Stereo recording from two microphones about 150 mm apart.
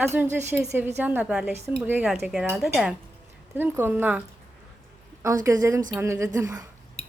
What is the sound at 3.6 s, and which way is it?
Speech, 15° right (ahead or behind).